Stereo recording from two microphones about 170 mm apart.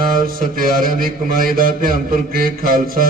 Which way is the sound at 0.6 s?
55° right (ahead or behind).